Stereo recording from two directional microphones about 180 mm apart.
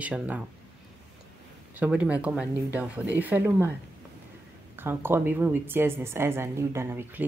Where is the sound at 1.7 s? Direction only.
10° right (ahead or behind).